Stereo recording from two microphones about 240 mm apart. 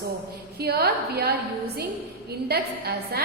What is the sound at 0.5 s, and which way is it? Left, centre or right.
Speech, right.